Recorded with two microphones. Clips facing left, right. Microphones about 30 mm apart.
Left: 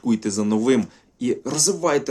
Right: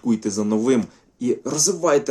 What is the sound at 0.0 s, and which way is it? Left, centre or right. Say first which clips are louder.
Speech: even; left.